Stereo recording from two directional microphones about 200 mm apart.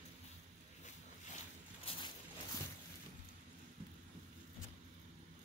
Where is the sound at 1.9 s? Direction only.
30° left (ahead or behind).